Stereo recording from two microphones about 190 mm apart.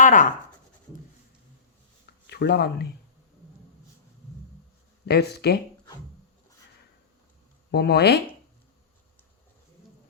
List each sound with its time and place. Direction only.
0.0 s speech: 45° left (ahead or behind)
2.2 s speech: 60° left (ahead or behind)
5.0 s speech: 60° left (ahead or behind)
7.7 s speech: 60° left (ahead or behind)